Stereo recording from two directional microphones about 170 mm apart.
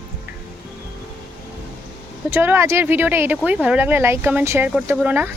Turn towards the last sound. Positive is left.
turn(degrees=-10)  # may be behind; listen again after turning